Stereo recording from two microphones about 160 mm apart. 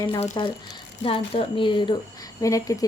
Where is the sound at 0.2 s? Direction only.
30° left (ahead or behind).